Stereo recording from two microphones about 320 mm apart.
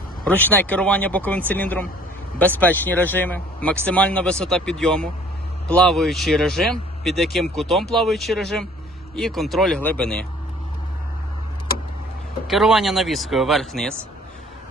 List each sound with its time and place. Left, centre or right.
0.3 s speech: centre
12.5 s speech: centre